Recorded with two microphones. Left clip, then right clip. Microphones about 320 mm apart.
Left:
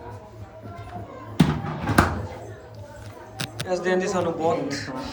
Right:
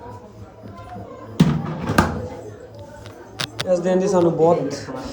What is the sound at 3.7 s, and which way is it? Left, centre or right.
A man's voice, right.